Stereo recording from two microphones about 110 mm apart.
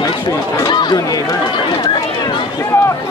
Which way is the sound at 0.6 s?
40° left (ahead or behind).